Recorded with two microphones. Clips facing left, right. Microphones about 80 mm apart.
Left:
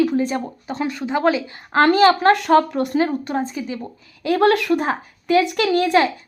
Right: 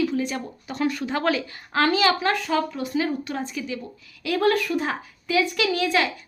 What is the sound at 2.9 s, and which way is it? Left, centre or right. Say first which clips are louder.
Speech: left 4 dB; left.